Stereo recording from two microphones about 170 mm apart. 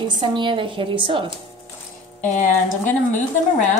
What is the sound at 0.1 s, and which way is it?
A woman's voice, 30° right (ahead or behind).